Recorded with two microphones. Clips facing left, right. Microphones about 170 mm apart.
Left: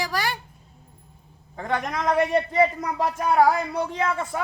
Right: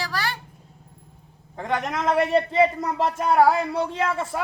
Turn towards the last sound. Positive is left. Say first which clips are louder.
# even
turn(degrees=-5)  # may be behind; listen again after turning